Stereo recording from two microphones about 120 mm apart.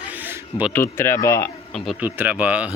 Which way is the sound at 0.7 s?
20° left (ahead or behind).